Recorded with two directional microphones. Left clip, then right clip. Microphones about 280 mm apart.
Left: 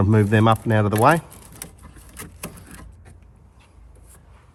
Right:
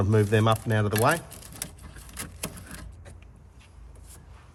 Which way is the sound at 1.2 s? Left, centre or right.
Centre.